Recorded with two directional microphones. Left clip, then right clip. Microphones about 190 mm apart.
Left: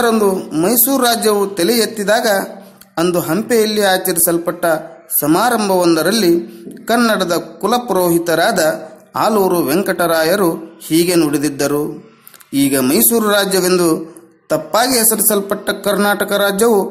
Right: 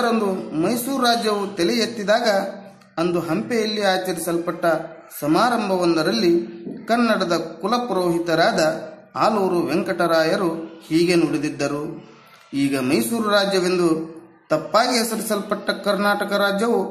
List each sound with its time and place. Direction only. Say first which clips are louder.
0.0 s a man's voice: left 7 dB; 30° left (ahead or behind)